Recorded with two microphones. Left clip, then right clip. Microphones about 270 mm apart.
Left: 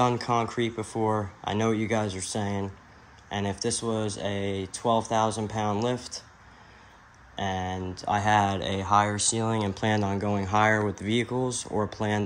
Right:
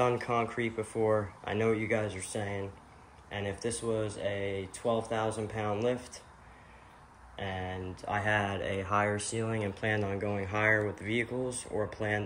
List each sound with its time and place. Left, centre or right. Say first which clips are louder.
0.0 s speech: left 4 dB; centre
7.3 s speech: left 7 dB; centre
11.4 s speech: left 6 dB; left